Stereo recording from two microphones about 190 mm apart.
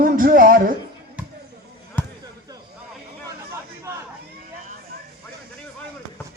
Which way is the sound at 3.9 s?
15° right (ahead or behind).